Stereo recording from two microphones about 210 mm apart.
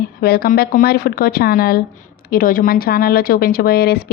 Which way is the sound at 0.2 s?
45° left (ahead or behind).